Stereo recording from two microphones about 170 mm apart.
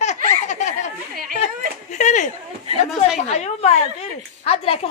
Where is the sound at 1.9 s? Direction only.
45° left (ahead or behind).